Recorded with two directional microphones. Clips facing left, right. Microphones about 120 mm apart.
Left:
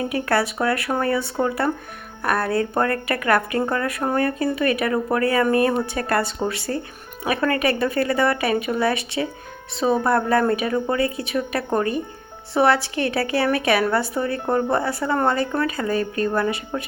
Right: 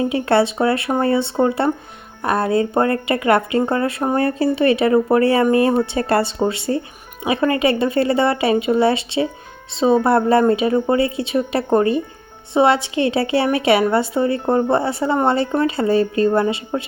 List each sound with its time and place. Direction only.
0.0 s a woman's voice: 25° right (ahead or behind)